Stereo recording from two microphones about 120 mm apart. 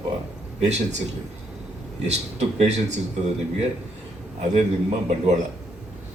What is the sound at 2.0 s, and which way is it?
Speech, 70° right (ahead or behind).